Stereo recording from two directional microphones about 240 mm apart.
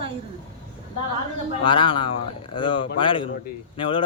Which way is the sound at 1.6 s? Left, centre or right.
Left.